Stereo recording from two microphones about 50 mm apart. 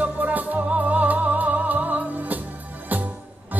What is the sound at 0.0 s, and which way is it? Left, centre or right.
Music, right.